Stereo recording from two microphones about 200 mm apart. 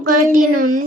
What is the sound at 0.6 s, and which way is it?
Speech, 40° right (ahead or behind).